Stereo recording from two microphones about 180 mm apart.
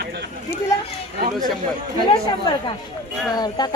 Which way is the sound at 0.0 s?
65° right (ahead or behind).